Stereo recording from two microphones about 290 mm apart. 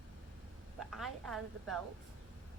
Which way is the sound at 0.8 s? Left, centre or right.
Centre.